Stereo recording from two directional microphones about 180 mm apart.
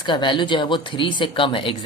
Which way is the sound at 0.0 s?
25° left (ahead or behind).